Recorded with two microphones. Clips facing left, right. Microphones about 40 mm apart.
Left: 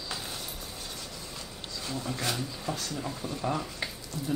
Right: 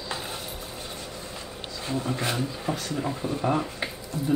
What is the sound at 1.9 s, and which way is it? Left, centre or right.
Speech, right.